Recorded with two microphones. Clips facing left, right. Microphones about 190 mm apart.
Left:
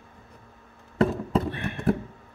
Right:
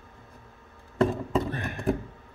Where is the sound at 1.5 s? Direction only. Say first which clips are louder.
Left 1 dB; 40° right (ahead or behind).